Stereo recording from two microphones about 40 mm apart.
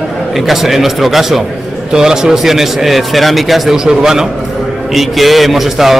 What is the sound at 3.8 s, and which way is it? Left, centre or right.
Speech, centre.